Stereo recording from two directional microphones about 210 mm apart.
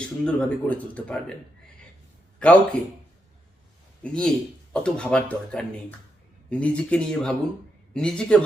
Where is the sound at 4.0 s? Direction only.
5° left (ahead or behind).